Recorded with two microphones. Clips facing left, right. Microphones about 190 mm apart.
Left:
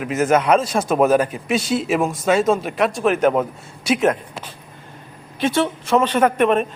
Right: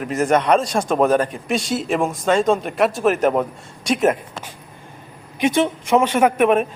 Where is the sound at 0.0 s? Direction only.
5° left (ahead or behind).